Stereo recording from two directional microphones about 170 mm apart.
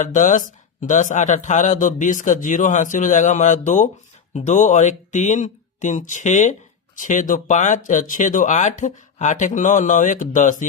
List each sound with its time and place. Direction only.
0.0 s speech: 45° left (ahead or behind)